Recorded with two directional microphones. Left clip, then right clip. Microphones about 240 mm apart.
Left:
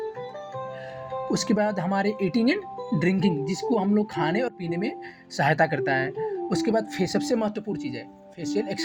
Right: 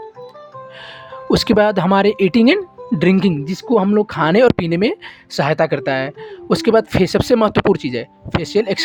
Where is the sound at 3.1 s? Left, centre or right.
Right.